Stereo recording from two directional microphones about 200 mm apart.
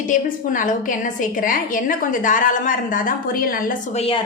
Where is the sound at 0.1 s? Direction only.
40° left (ahead or behind).